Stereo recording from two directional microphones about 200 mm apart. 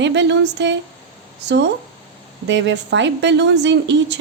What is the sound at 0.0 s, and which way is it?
Speech, 60° right (ahead or behind).